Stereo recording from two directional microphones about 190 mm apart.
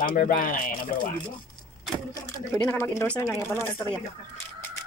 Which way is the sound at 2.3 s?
15° left (ahead or behind).